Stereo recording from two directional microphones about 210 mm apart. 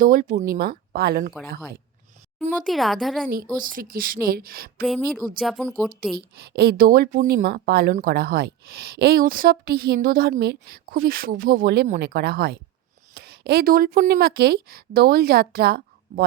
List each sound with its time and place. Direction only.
0.0 s a woman's voice: 40° right (ahead or behind)
2.5 s speech: centre (ahead or behind)
3.2 s a woman's voice: 45° right (ahead or behind)
4.8 s speech: centre (ahead or behind)
6.1 s a woman's voice: 50° right (ahead or behind)